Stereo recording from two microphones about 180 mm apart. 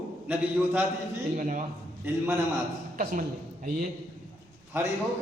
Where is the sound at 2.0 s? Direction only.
10° right (ahead or behind).